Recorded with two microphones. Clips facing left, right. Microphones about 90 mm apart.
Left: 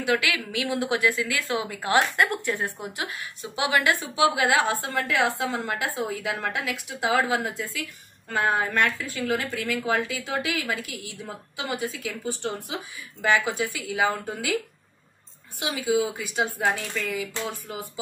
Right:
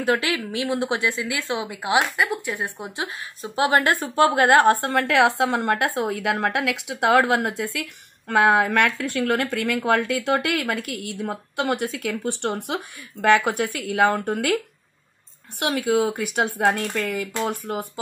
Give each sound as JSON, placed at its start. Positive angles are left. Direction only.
{"t": 0.0, "sound": "a woman's voice", "side_deg": -35}
{"t": 2.1, "sound": "a woman's voice", "side_deg": -5}
{"t": 2.5, "sound": "a woman's voice", "side_deg": -20}
{"t": 3.1, "sound": "a woman's voice", "side_deg": -40}
{"t": 15.6, "sound": "a woman's voice", "side_deg": -60}